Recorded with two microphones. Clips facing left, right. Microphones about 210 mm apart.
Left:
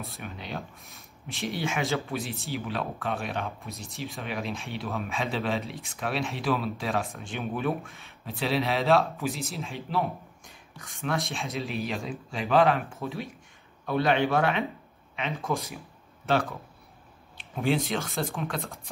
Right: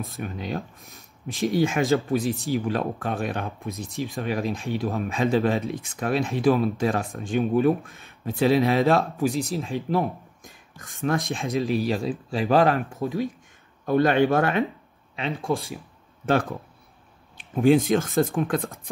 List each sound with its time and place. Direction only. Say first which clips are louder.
0.0 s speech: right 7 dB; 45° right (ahead or behind)
15.1 s speech: right 4 dB; 30° right (ahead or behind)
17.4 s speech: right 9 dB; 50° right (ahead or behind)